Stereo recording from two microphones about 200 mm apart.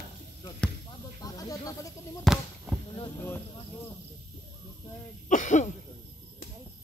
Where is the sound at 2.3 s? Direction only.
Centre (ahead or behind).